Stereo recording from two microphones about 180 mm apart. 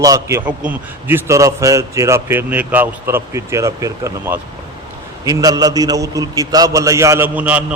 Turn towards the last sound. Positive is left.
turn(degrees=-10)  # may be behind; listen again after turning